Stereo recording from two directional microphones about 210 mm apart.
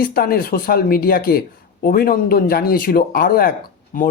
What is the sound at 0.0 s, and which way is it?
Speech, 45° left (ahead or behind).